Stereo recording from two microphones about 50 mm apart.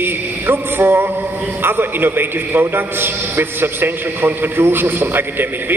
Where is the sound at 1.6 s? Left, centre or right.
Right.